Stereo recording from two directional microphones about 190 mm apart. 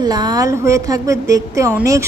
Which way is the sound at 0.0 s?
20° right (ahead or behind).